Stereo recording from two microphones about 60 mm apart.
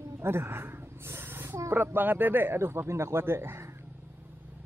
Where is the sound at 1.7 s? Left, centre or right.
Right.